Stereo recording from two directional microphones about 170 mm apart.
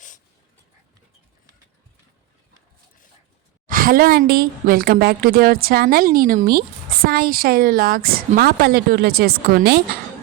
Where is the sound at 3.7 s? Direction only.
55° right (ahead or behind).